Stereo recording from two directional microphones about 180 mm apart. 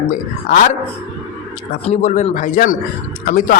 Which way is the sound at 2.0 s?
45° left (ahead or behind).